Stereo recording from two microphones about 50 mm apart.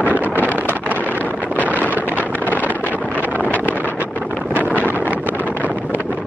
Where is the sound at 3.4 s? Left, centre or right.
Left.